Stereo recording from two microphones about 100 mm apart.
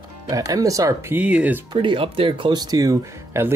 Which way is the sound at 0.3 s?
35° right (ahead or behind).